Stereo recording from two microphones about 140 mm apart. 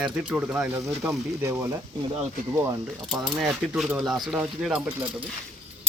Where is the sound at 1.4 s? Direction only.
15° right (ahead or behind).